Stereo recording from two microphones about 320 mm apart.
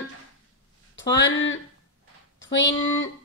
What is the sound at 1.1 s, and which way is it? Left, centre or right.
A woman's voice, left.